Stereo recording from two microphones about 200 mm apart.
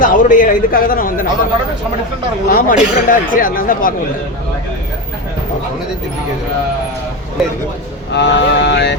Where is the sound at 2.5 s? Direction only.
45° left (ahead or behind).